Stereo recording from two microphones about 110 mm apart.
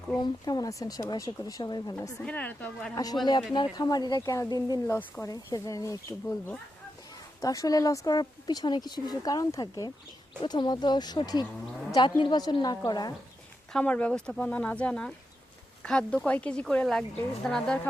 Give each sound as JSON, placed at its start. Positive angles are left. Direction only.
{"t": 0.2, "sound": "speech", "side_deg": 35}
{"t": 2.2, "sound": "a woman's voice", "side_deg": 15}
{"t": 2.9, "sound": "speech", "side_deg": 35}
{"t": 4.9, "sound": "a woman's voice", "side_deg": 15}
{"t": 5.2, "sound": "speech", "side_deg": 30}
{"t": 7.4, "sound": "speech", "side_deg": 30}
{"t": 13.7, "sound": "a woman's voice", "side_deg": 10}